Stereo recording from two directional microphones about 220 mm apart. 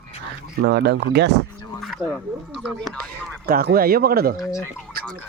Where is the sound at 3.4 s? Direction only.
45° right (ahead or behind).